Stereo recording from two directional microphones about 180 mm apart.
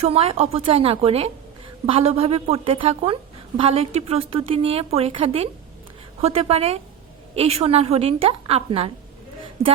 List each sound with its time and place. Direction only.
0.0 s a woman's voice: 35° right (ahead or behind)